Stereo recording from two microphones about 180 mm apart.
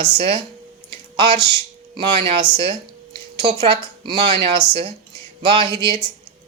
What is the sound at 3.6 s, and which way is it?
A woman's voice, 25° right (ahead or behind).